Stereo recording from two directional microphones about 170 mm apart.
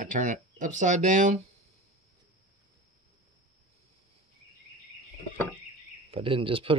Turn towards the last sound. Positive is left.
turn(degrees=-30)  # may be behind; listen again after turning